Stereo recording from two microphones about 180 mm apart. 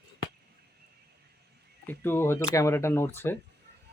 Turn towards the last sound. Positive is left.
turn(degrees=10)  # may be behind; listen again after turning